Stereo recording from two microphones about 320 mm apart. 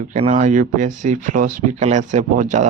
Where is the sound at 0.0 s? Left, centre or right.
Right.